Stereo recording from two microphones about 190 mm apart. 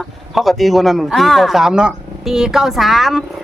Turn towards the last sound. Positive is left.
turn(degrees=0)  # may be behind; listen again after turning